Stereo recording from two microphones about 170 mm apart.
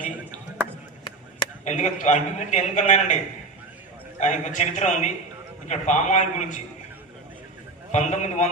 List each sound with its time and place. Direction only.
1.6 s a man's voice: 45° left (ahead or behind)
4.2 s a man's voice: 45° left (ahead or behind)
7.9 s a man's voice: 45° left (ahead or behind)